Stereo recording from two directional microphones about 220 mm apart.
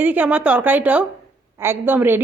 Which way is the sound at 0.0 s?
5° right (ahead or behind).